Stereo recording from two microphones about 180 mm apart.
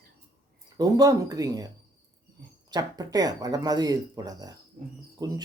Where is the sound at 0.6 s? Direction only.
20° right (ahead or behind).